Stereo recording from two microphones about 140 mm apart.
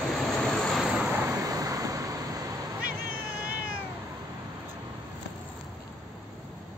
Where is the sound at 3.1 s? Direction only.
90° right.